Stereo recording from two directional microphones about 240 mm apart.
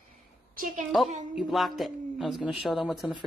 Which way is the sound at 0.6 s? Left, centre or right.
Right.